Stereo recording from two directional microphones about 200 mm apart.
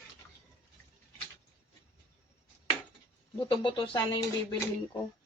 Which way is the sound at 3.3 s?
20° left (ahead or behind).